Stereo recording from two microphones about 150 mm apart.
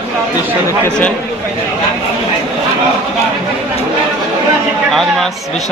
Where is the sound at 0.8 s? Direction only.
10° left (ahead or behind).